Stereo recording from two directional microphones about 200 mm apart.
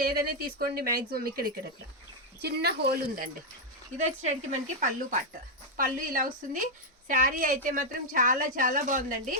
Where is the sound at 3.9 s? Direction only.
35° right (ahead or behind).